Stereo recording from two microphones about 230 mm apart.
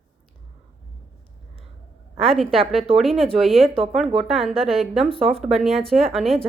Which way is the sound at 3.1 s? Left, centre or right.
Right.